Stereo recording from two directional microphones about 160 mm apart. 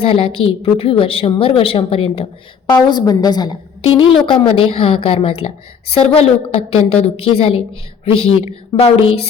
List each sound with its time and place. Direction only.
0.0 s a woman's voice: 35° left (ahead or behind)